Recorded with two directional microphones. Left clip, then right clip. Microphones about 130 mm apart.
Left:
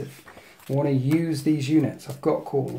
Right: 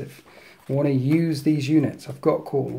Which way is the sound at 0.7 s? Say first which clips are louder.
Right 2 dB; 35° right (ahead or behind).